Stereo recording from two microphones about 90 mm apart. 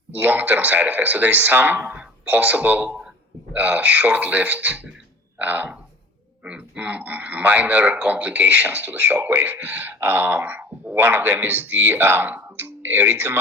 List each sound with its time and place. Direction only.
0.1 s speech: 15° right (ahead or behind)